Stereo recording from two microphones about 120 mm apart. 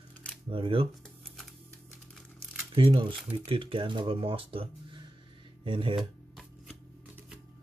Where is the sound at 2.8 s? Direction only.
50° right (ahead or behind).